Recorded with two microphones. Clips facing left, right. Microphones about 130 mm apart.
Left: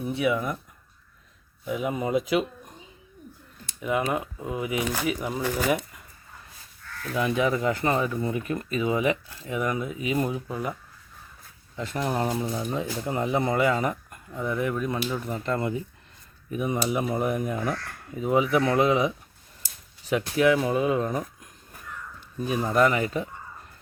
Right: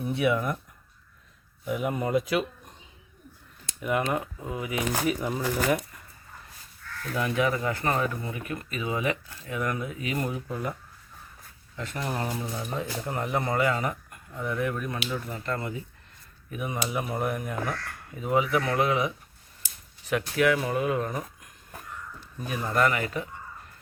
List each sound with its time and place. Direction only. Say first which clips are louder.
0.0 s speech: even; centre (ahead or behind)
1.6 s speech: even; 5° right (ahead or behind)
1.9 s speech: left 2 dB; 5° left (ahead or behind)
3.9 s speech: left 1 dB; 5° left (ahead or behind)
4.4 s speech: left 3 dB; 20° left (ahead or behind)
5.0 s speech: even; 5° left (ahead or behind)
7.2 s speech: left 2 dB; 20° left (ahead or behind)
11.9 s speech: left 5 dB; 25° left (ahead or behind)
22.4 s speech: left 3 dB; 20° left (ahead or behind)